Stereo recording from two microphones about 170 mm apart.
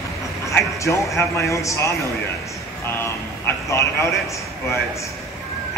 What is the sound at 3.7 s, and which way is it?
Speech, 15° left (ahead or behind).